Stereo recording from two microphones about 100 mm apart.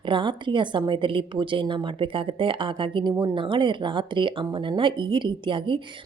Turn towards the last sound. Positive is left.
turn(degrees=-55)  # may be behind; listen again after turning